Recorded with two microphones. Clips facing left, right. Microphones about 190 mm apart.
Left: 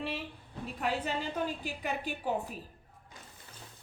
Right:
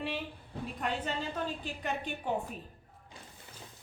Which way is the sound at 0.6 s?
5° left (ahead or behind).